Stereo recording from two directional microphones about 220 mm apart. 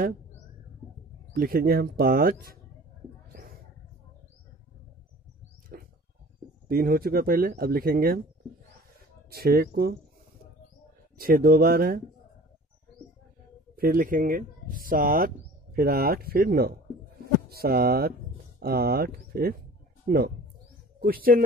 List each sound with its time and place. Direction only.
1.3 s speech: 45° right (ahead or behind)
5.7 s a sound: 40° right (ahead or behind)
6.7 s speech: 40° right (ahead or behind)
9.3 s speech: 45° right (ahead or behind)
11.1 s speech: 40° right (ahead or behind)
13.7 s speech: 40° right (ahead or behind)